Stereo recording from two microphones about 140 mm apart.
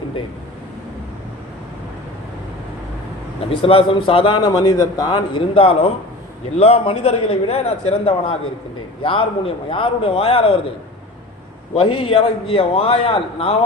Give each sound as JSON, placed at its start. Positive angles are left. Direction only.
{"t": 3.5, "sound": "a man's voice", "side_deg": 40}
{"t": 11.8, "sound": "a man's voice", "side_deg": 40}